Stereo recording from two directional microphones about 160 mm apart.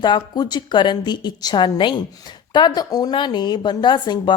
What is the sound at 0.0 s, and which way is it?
A woman's voice, 25° left (ahead or behind).